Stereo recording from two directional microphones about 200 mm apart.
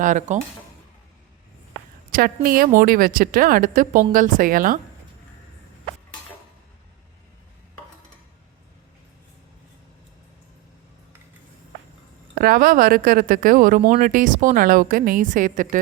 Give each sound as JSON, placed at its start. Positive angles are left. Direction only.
{"t": 0.0, "sound": "speech", "side_deg": -40}
{"t": 2.0, "sound": "speech", "side_deg": -45}
{"t": 12.3, "sound": "speech", "side_deg": -45}